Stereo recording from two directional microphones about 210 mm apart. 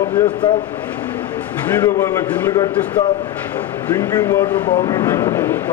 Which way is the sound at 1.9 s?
15° left (ahead or behind).